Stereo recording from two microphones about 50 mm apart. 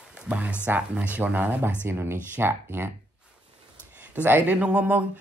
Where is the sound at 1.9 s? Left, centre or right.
Right.